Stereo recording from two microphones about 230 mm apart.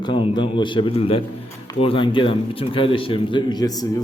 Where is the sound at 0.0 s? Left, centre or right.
Left.